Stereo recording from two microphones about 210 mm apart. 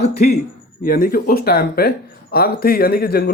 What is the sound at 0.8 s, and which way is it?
Speech, 45° left (ahead or behind).